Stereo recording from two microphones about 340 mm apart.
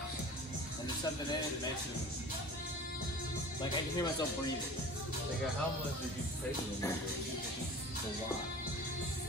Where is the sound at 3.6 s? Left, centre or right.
Centre.